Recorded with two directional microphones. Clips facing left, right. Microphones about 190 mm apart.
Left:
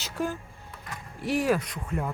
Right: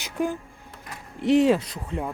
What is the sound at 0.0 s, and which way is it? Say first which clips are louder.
Speech: right 4 dB; 15° right (ahead or behind).